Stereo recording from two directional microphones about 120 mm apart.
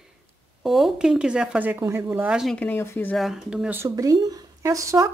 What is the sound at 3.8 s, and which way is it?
Speech, 30° right (ahead or behind).